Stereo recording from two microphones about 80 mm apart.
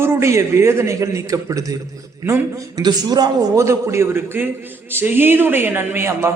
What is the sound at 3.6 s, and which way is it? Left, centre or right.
A man's voice, right.